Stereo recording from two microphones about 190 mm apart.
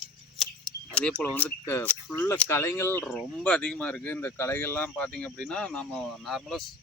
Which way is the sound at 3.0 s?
Centre (ahead or behind).